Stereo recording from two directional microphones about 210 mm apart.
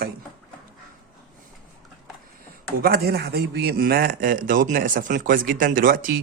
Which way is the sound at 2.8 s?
45° right (ahead or behind).